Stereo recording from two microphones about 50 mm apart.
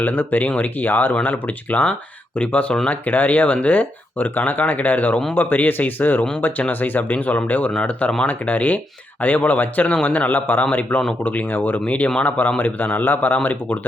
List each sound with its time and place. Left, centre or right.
0.0 s speech: left